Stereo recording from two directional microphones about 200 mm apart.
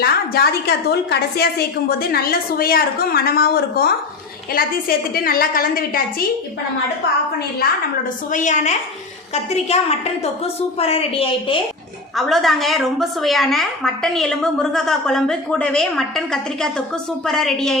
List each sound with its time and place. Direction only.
0.0 s a woman's voice: 50° left (ahead or behind)
8.3 s a woman's voice: 40° left (ahead or behind)
12.1 s a woman's voice: centre (ahead or behind)